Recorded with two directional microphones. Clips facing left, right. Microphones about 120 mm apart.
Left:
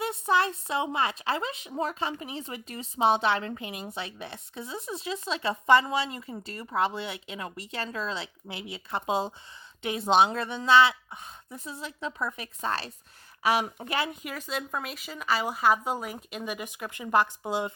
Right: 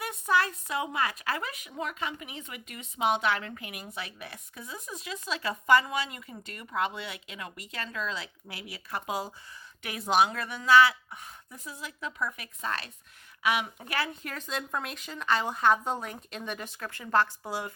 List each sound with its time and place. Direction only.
0.0 s a woman's voice: 25° left (ahead or behind)
13.9 s a woman's voice: 15° left (ahead or behind)